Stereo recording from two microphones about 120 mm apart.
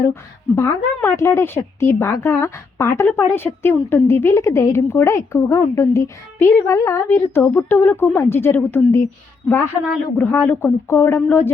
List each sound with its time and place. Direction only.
0.1 s a woman's voice: 20° left (ahead or behind)